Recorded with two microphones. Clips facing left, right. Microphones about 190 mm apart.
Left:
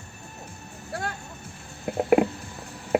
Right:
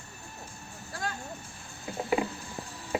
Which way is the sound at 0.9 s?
60° left (ahead or behind).